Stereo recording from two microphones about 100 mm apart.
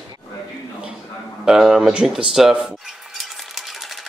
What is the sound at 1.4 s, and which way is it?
Dishes, 5° right (ahead or behind).